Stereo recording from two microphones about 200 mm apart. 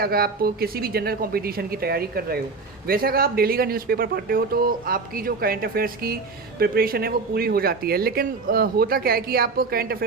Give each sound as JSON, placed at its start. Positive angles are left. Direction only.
{"t": 0.0, "sound": "speech", "side_deg": -50}